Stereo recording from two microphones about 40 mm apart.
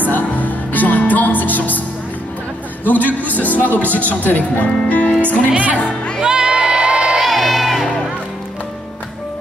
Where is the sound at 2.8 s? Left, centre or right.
Left.